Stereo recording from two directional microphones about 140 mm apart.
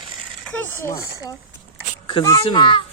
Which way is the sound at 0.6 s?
20° left (ahead or behind).